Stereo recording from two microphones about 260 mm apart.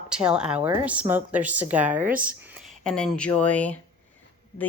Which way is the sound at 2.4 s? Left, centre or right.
Centre.